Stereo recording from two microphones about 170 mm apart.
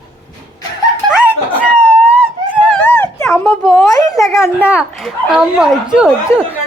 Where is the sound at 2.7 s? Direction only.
10° left (ahead or behind).